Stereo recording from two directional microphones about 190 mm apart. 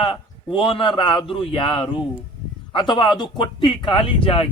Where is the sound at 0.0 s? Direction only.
25° left (ahead or behind).